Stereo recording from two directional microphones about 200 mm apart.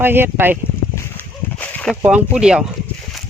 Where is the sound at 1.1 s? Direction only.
10° left (ahead or behind).